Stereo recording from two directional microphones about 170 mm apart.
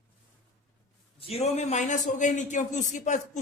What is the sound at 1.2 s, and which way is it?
A man's voice, 35° left (ahead or behind).